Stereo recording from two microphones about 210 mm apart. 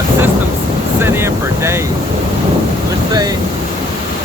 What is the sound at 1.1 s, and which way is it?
Speech, 10° right (ahead or behind).